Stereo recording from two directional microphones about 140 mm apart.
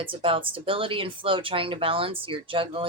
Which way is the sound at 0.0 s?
40° right (ahead or behind).